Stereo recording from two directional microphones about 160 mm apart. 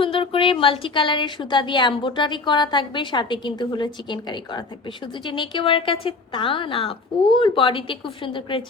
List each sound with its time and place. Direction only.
0.0 s a woman's voice: 35° left (ahead or behind)